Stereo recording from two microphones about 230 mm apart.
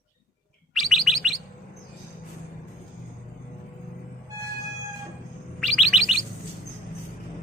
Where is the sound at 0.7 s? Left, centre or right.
Centre.